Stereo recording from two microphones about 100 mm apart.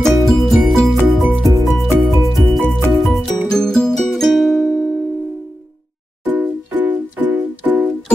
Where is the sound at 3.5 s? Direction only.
5° left (ahead or behind).